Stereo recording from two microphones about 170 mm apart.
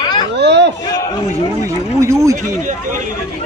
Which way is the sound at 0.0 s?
25° left (ahead or behind).